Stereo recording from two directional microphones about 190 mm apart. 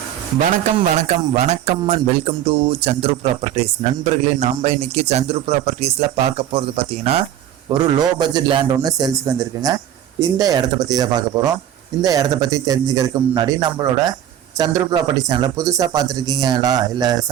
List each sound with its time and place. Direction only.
0.3 s speech: 40° right (ahead or behind)
4.4 s speech: 35° right (ahead or behind); by 17.2 s 20° right (ahead or behind)